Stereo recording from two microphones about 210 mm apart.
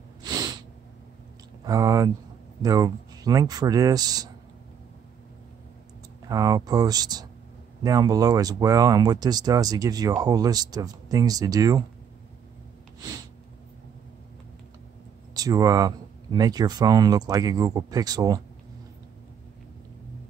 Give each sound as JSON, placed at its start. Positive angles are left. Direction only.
{"t": 0.2, "sound": "sneeze", "side_deg": -20}
{"t": 1.7, "sound": "speech", "side_deg": -15}
{"t": 6.2, "sound": "speech", "side_deg": -15}
{"t": 15.3, "sound": "speech", "side_deg": -15}